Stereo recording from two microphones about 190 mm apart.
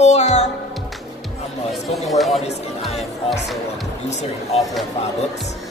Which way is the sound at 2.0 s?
Centre (ahead or behind).